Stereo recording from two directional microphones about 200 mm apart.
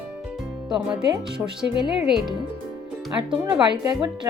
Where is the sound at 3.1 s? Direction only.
25° right (ahead or behind).